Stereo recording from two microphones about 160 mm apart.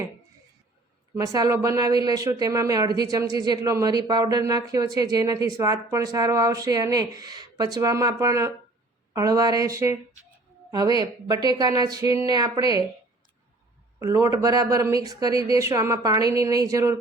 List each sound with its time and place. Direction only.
1.1 s speech: 20° right (ahead or behind)
14.0 s speech: 20° right (ahead or behind)